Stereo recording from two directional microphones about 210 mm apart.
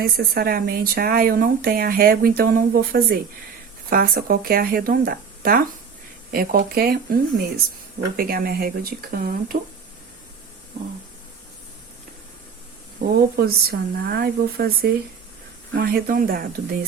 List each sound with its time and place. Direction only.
0.0 s speech: 45° right (ahead or behind)
13.3 s speech: 50° right (ahead or behind)